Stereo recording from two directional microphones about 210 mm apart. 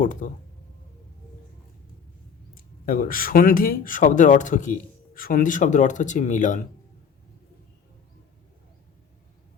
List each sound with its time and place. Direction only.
0.0 s speech: 40° left (ahead or behind)
2.6 s speech: 40° left (ahead or behind)